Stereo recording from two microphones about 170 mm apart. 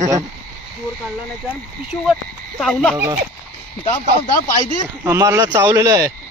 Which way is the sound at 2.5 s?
5° left (ahead or behind).